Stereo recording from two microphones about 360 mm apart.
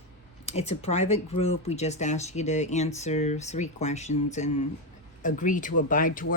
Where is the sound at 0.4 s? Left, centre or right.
Centre.